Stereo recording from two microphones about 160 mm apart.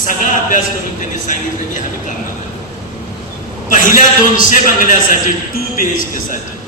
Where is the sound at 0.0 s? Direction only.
55° left (ahead or behind).